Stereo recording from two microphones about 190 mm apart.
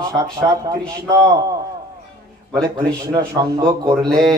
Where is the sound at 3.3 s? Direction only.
20° right (ahead or behind).